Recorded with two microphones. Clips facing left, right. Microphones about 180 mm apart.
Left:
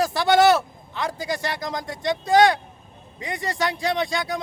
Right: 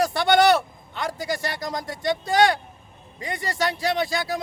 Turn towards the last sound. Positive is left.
turn(degrees=-5)  # may be behind; listen again after turning